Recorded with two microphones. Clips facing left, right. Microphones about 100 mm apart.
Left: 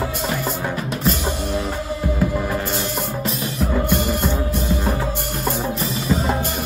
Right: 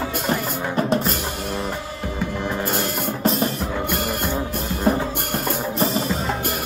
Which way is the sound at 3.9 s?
55° right (ahead or behind).